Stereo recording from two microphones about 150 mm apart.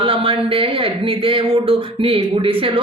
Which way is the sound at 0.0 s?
35° right (ahead or behind).